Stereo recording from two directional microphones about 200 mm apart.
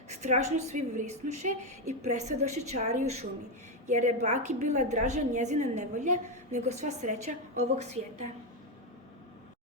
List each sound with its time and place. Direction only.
0.1 s a woman's voice: 35° right (ahead or behind)